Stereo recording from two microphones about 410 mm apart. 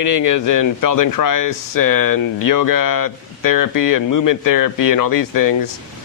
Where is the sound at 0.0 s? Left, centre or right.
Left.